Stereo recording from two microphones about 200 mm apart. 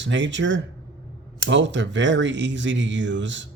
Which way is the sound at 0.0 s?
65° right (ahead or behind).